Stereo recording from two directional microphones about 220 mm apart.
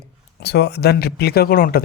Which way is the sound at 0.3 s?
50° left (ahead or behind).